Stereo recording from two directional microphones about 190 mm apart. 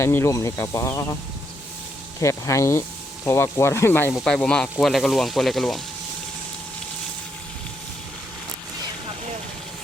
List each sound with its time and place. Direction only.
0.0 s speech: 15° left (ahead or behind)
2.2 s speech: 15° left (ahead or behind)